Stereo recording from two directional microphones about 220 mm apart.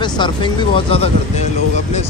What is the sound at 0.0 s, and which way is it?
Speech, 20° left (ahead or behind).